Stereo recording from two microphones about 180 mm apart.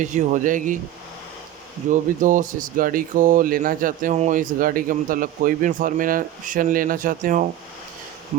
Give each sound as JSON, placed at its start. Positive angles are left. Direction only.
{"t": 0.0, "sound": "speech", "side_deg": -40}
{"t": 1.9, "sound": "speech", "side_deg": -45}